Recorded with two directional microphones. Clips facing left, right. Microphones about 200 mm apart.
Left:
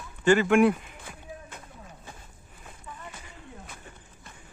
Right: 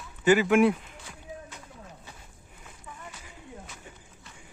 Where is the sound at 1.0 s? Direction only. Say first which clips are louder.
Even; 55° left (ahead or behind).